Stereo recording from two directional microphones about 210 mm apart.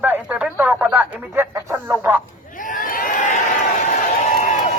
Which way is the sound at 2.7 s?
40° left (ahead or behind).